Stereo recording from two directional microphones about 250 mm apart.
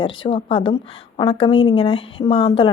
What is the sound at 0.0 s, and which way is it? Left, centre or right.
Speech, centre.